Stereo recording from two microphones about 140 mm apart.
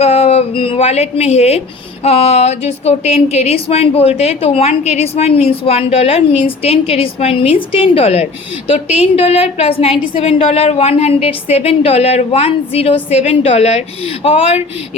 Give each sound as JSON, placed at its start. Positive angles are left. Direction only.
{"t": 0.0, "sound": "a woman's voice", "side_deg": 45}